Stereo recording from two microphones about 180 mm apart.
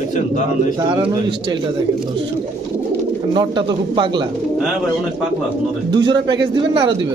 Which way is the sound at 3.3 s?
25° right (ahead or behind).